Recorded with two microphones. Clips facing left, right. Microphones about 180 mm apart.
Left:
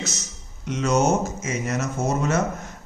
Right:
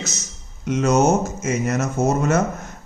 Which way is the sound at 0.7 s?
45° right (ahead or behind).